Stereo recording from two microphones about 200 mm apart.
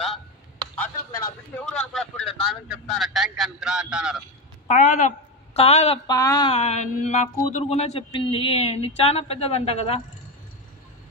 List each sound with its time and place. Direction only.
1.7 s speech: 5° left (ahead or behind)
4.6 s a woman's voice: 40° left (ahead or behind)
6.0 s speech: 20° left (ahead or behind)